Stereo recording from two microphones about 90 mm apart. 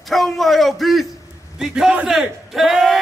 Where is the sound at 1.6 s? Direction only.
5° right (ahead or behind).